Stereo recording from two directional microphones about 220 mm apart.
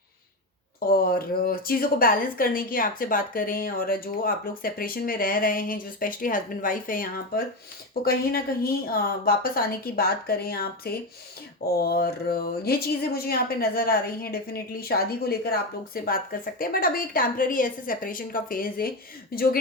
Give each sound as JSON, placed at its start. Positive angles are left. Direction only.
{"t": 0.9, "sound": "a woman's voice", "side_deg": 40}